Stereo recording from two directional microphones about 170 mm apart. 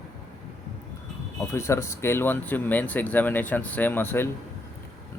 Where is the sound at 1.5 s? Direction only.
15° left (ahead or behind).